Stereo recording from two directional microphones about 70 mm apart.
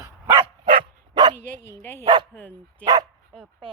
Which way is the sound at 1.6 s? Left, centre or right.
Left.